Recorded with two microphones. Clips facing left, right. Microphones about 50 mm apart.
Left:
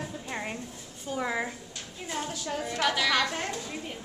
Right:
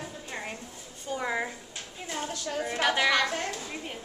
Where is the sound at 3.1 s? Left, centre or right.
Centre.